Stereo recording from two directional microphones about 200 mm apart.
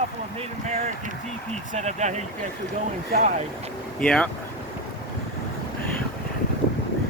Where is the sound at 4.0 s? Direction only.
5° left (ahead or behind).